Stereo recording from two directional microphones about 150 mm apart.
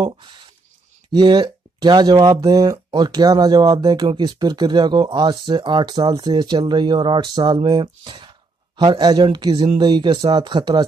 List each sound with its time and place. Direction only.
1.1 s speech: 30° right (ahead or behind)